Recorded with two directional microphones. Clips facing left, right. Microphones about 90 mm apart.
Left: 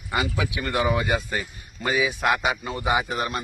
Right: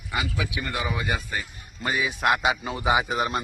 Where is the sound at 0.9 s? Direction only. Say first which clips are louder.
Left 6 dB; 20° left (ahead or behind).